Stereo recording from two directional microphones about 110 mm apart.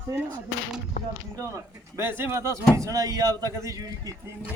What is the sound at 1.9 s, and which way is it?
Speech, 25° right (ahead or behind).